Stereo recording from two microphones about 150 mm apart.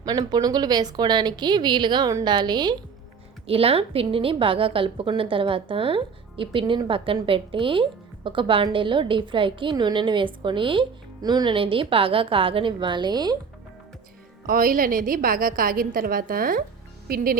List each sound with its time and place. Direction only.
0.0 s speech: 25° right (ahead or behind)
3.4 s a woman's voice: 40° right (ahead or behind)
14.4 s a woman's voice: 70° right (ahead or behind)